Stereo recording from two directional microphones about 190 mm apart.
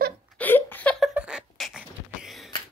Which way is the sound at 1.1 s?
5° right (ahead or behind).